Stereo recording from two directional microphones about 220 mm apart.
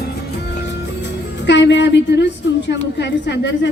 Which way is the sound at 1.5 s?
55° left (ahead or behind).